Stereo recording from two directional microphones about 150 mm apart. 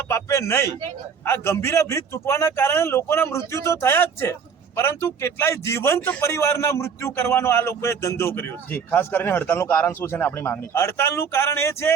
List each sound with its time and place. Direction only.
0.1 s a man's voice: 20° left (ahead or behind)